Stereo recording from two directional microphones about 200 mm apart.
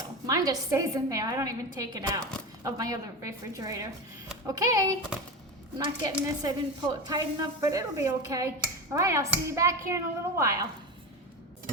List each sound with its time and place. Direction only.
0.3 s speech: 20° right (ahead or behind)